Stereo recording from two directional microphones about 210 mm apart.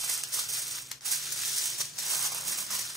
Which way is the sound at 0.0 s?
Centre (ahead or behind).